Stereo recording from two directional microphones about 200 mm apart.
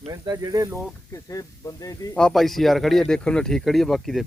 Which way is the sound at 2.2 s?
Centre (ahead or behind).